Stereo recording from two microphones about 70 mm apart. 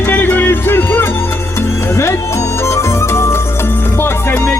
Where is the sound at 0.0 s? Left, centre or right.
Left.